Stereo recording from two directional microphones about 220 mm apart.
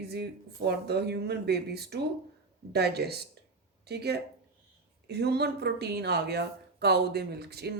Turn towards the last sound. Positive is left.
turn(degrees=-45)  # may be behind; listen again after turning